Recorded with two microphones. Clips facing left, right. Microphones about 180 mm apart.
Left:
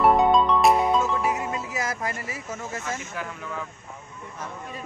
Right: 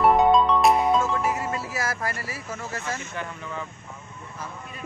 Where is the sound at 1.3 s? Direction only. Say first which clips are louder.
Even; 20° left (ahead or behind).